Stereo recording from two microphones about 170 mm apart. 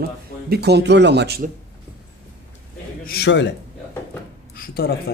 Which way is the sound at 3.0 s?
70° left (ahead or behind).